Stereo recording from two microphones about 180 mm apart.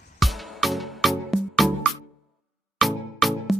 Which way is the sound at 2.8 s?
Centre (ahead or behind).